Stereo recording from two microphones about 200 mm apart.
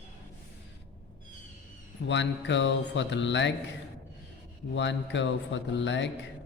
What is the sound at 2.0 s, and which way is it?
Speech, 65° left (ahead or behind).